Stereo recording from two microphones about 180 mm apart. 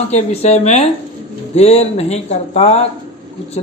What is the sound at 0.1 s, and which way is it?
A man's voice, 40° left (ahead or behind).